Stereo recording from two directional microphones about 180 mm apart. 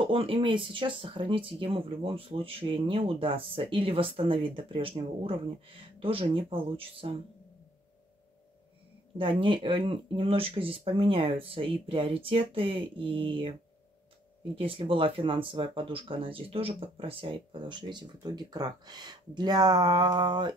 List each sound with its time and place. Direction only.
0.0 s speech: 30° right (ahead or behind)
9.2 s speech: 30° right (ahead or behind)
14.5 s speech: 30° right (ahead or behind)